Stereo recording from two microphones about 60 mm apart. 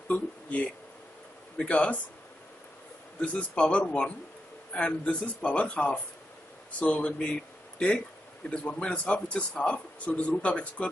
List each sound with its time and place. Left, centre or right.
0.1 s a man's voice: left
3.2 s a man's voice: left
8.5 s a man's voice: centre